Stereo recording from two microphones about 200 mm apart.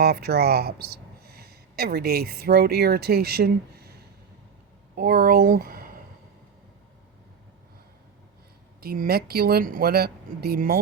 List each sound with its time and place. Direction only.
0.0 s speech: 55° right (ahead or behind)
4.9 s speech: 50° right (ahead or behind)
8.8 s speech: 50° right (ahead or behind)